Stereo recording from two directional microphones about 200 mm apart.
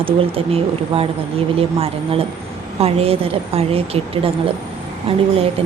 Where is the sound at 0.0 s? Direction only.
30° right (ahead or behind).